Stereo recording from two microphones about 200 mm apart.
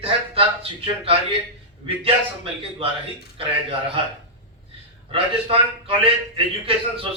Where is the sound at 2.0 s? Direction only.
25° right (ahead or behind).